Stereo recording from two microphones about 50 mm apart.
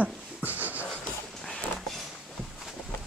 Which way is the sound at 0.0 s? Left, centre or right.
Right.